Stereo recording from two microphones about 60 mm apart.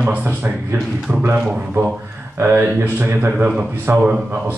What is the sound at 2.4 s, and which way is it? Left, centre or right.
Speech, right.